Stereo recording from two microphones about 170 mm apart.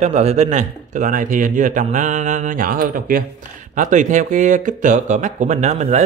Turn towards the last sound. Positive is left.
turn(degrees=-45)  # may be behind; listen again after turning